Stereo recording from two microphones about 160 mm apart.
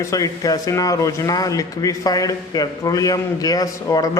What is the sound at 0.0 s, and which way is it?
Speech, 20° left (ahead or behind).